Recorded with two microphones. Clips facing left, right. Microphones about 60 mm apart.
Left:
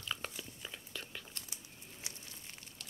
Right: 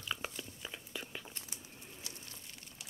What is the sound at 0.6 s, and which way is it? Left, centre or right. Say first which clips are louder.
Whispering: right 3 dB; centre.